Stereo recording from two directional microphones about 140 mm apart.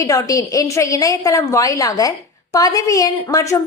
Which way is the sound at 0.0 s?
25° left (ahead or behind).